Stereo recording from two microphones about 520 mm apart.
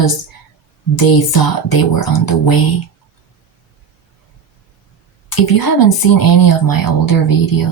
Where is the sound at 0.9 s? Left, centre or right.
Left.